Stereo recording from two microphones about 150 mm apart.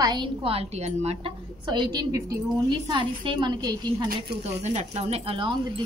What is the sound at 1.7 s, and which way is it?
A woman's voice, 25° right (ahead or behind).